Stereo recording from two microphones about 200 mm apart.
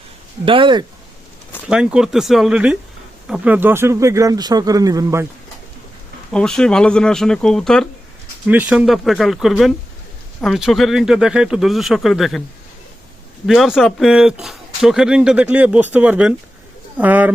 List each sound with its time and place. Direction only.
0.4 s speech: 25° right (ahead or behind)
1.6 s speech: 5° right (ahead or behind)
6.3 s speech: 5° left (ahead or behind)
8.4 s speech: 5° right (ahead or behind)
13.5 s speech: centre (ahead or behind)